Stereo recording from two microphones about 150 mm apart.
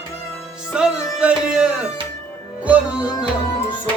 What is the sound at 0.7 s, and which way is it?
Music, 5° right (ahead or behind).